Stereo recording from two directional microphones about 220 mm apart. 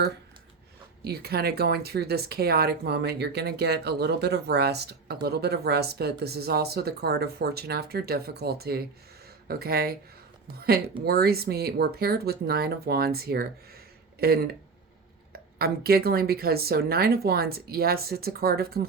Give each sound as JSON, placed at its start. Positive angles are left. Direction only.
{"t": 1.0, "sound": "speech", "side_deg": -45}
{"t": 11.0, "sound": "speech", "side_deg": -45}